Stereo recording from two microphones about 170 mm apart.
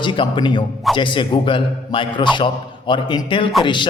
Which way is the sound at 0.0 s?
30° left (ahead or behind).